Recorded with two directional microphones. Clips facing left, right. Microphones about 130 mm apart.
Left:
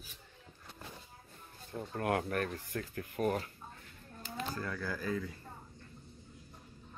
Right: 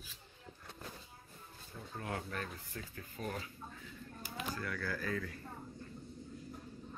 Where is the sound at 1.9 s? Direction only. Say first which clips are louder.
Left 8 dB; 65° left (ahead or behind).